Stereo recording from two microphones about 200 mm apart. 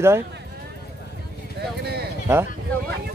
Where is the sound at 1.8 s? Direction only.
50° right (ahead or behind).